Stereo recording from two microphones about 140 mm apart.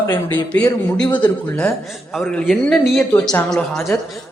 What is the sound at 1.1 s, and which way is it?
Speech, 35° left (ahead or behind).